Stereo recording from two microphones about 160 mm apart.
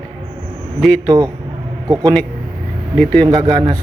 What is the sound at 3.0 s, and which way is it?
Speech, 10° left (ahead or behind).